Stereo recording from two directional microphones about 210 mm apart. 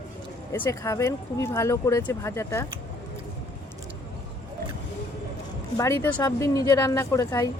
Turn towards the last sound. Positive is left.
turn(degrees=15)  # may be behind; listen again after turning